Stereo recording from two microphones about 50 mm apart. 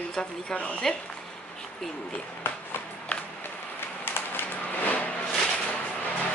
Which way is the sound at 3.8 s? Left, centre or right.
Left.